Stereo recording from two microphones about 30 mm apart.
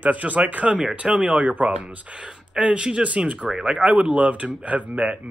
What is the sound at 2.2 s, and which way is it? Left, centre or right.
Speech, right.